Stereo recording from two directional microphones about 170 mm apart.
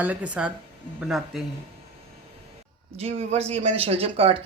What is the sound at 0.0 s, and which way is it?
Speech, 10° right (ahead or behind).